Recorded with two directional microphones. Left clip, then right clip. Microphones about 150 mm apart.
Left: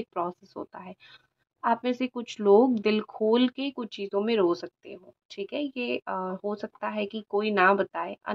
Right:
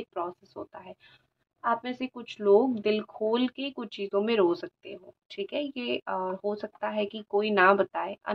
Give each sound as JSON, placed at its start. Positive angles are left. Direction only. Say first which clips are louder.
{"t": 0.1, "sound": "speech", "louder": "left 3 dB", "side_deg": 35}
{"t": 1.6, "sound": "speech", "louder": "left 3 dB", "side_deg": 40}